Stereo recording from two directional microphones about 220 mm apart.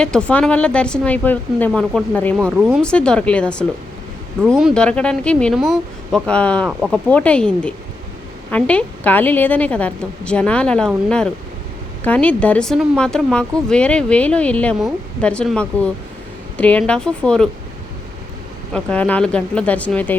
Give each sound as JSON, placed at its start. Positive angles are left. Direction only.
{"t": 0.0, "sound": "a woman's voice", "side_deg": 5}
{"t": 2.6, "sound": "a woman's voice", "side_deg": -5}
{"t": 2.8, "sound": "a woman's voice", "side_deg": 5}
{"t": 18.7, "sound": "a woman's voice", "side_deg": 5}